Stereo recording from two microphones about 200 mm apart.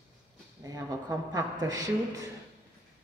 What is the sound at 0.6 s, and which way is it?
Speech, 20° right (ahead or behind).